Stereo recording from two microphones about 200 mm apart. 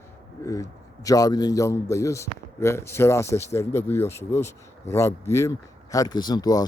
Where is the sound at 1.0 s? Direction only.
20° left (ahead or behind).